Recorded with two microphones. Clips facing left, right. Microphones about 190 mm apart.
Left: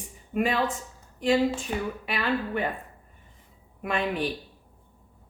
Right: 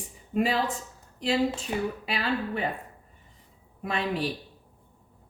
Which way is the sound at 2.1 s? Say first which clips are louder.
Left 1 dB; 35° right (ahead or behind).